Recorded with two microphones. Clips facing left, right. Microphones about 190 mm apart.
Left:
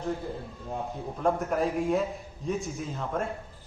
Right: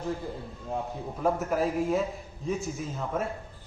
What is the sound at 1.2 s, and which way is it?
A man's voice, centre (ahead or behind).